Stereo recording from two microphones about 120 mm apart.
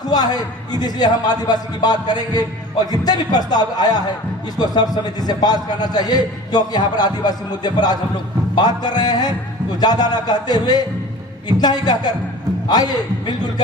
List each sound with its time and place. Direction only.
0.1 s a man's voice: 35° left (ahead or behind)